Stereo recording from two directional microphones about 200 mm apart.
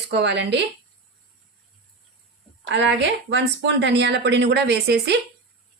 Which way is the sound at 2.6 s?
65° right (ahead or behind).